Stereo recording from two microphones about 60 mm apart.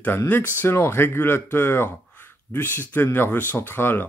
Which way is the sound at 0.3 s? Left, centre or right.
Left.